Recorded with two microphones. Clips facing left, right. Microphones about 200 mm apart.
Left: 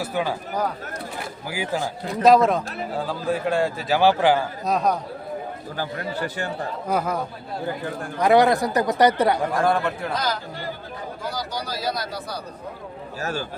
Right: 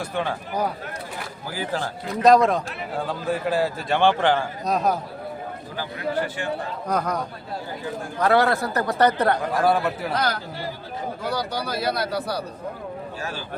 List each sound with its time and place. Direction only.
0.0 s speech: 5° left (ahead or behind)
1.5 s a man's voice: 10° left (ahead or behind)
5.7 s a man's voice: 45° left (ahead or behind)
6.8 s a man's voice: 5° left (ahead or behind)
8.2 s speech: 15° left (ahead or behind)
9.6 s a man's voice: 5° right (ahead or behind)
10.1 s speech: 60° right (ahead or behind)